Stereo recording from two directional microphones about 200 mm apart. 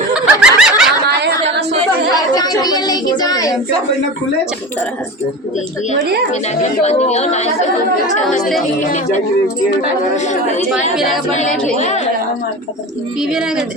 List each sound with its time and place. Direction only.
0.1 s snicker: 5° right (ahead or behind)
2.1 s a sound: 20° left (ahead or behind)
6.6 s a woman's voice: 35° left (ahead or behind)
10.2 s a woman's voice: 35° left (ahead or behind)
10.9 s speech: centre (ahead or behind)
11.8 s a woman's voice: 35° left (ahead or behind)
13.3 s speech: 5° right (ahead or behind)